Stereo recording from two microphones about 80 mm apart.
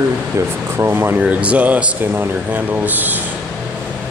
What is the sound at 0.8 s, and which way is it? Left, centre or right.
Speech, right.